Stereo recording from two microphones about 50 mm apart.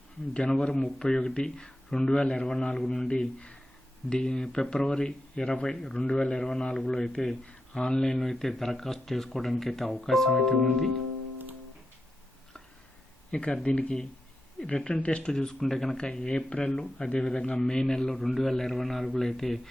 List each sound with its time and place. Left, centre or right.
0.8 s speech: centre
13.3 s speech: centre
15.3 s speech: centre